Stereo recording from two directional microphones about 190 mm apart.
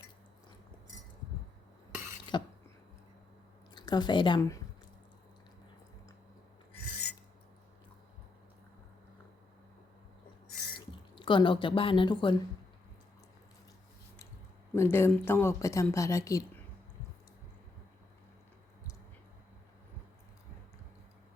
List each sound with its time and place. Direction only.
2.3 s a sound: 25° left (ahead or behind)
3.8 s speech: 20° left (ahead or behind)
10.8 s speech: 25° left (ahead or behind)
14.8 s speech: 10° left (ahead or behind)